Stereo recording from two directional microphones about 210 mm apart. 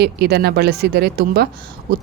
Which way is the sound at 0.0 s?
50° right (ahead or behind).